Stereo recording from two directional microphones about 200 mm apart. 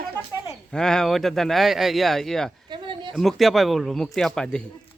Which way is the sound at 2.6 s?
25° right (ahead or behind).